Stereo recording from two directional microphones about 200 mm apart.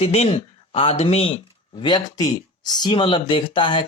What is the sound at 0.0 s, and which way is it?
Speech, 30° left (ahead or behind).